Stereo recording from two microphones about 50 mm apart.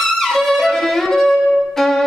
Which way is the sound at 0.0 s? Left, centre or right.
Centre.